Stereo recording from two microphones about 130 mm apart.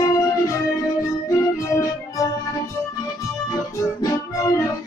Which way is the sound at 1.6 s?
25° left (ahead or behind).